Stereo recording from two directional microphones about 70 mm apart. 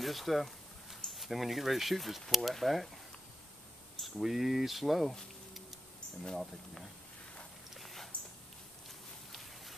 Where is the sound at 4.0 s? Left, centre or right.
Centre.